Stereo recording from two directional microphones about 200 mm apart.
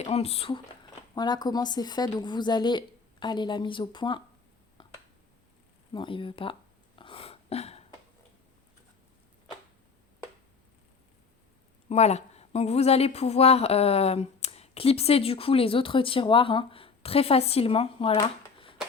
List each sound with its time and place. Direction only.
0.0 s a woman's voice: 30° left (ahead or behind)
4.8 s finger snapping: 25° left (ahead or behind)
5.9 s a sound: 25° left (ahead or behind)
11.9 s a woman's voice: 35° left (ahead or behind)